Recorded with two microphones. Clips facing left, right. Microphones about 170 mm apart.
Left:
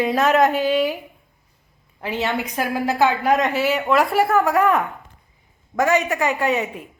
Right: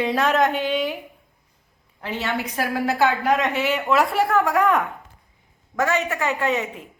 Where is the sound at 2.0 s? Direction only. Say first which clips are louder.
Left 3 dB; 15° left (ahead or behind).